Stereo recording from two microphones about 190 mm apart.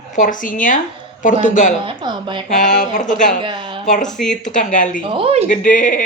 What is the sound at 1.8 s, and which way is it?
Speech, 25° right (ahead or behind).